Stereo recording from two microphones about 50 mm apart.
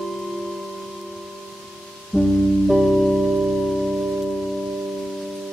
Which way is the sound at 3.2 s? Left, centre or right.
Centre.